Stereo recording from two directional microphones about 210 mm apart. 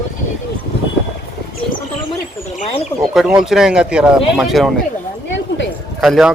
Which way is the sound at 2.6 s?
30° left (ahead or behind).